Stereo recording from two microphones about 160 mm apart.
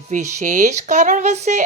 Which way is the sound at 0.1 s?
50° right (ahead or behind).